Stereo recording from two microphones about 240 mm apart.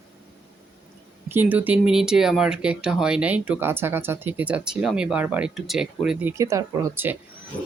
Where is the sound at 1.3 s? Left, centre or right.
Centre.